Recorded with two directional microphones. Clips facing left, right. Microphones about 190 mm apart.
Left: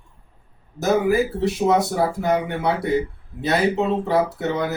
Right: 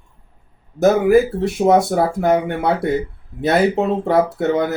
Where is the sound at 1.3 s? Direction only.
50° right (ahead or behind).